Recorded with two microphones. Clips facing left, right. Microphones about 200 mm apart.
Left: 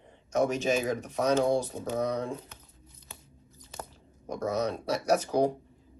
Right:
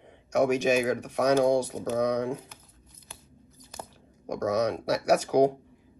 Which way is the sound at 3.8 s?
15° right (ahead or behind).